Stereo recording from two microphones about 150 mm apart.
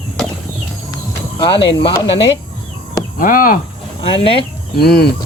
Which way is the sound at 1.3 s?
30° left (ahead or behind).